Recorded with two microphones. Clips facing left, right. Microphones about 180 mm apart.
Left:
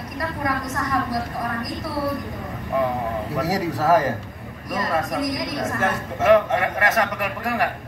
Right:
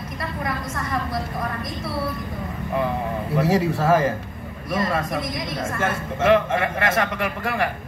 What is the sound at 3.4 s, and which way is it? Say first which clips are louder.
A man's voice: right 3 dB; 25° right (ahead or behind).